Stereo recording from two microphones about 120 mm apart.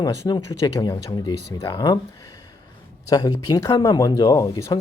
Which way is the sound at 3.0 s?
30° left (ahead or behind).